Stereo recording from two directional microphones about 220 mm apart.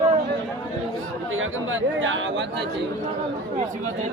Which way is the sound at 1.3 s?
60° right (ahead or behind).